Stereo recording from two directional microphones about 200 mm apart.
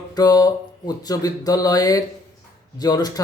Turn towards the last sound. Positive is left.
turn(degrees=20)  # may be behind; listen again after turning